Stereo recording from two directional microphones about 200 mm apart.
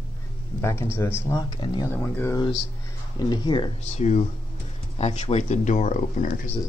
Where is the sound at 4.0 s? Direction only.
35° left (ahead or behind).